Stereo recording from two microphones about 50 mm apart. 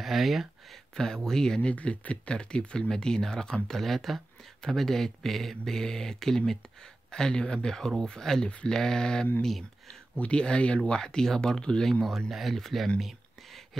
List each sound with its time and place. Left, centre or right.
0.0 s speech: centre
0.9 s speech: centre
1.6 s speech: left; by 9.7 s centre
10.1 s speech: left
12.3 s speech: centre
13.0 s a sound: centre